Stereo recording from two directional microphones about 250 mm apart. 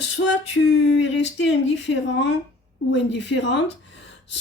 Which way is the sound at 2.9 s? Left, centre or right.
Left.